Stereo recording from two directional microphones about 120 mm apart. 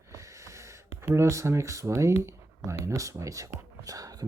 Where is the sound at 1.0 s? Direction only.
20° right (ahead or behind).